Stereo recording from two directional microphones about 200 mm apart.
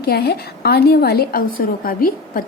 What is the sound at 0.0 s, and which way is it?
Speech, 50° left (ahead or behind).